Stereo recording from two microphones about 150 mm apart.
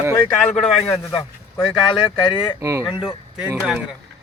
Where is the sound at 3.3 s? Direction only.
10° right (ahead or behind).